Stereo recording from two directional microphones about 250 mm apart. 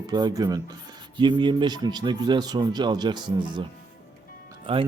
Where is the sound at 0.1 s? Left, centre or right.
Centre.